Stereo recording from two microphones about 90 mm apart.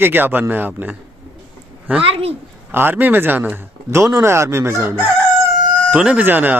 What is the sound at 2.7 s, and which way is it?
Speech, 25° right (ahead or behind).